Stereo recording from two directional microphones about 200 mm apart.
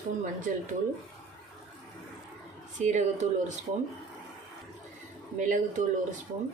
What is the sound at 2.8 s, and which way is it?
Speech, 35° right (ahead or behind).